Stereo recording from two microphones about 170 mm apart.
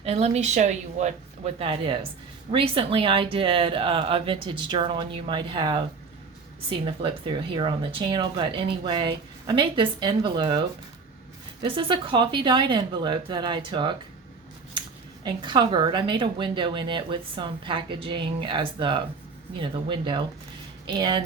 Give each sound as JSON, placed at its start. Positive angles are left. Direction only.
{"t": 0.0, "sound": "speech", "side_deg": -40}
{"t": 1.5, "sound": "speech", "side_deg": -30}
{"t": 11.6, "sound": "speech", "side_deg": -30}